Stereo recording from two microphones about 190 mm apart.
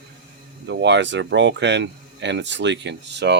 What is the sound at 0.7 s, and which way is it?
Speech, 65° right (ahead or behind).